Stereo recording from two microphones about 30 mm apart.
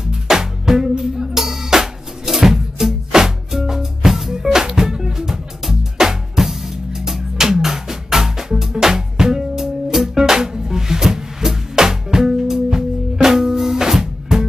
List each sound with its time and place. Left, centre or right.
0.0 s music: right